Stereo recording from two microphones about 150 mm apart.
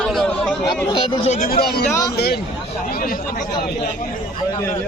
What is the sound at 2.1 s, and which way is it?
Speech, 90° left.